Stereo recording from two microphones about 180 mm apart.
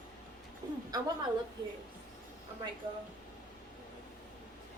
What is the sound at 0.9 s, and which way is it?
Speech, 20° right (ahead or behind).